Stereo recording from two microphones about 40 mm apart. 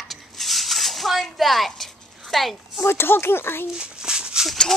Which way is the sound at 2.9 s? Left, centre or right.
Left.